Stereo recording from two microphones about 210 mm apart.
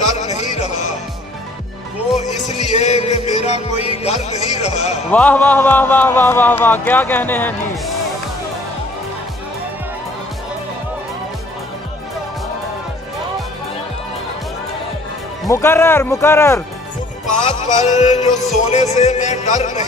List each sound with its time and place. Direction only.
0.4 s music: 35° left (ahead or behind)
2.2 s music: 35° left (ahead or behind)
5.1 s speech: 5° left (ahead or behind)
15.4 s speech: 15° left (ahead or behind)
17.6 s speech: 35° left (ahead or behind)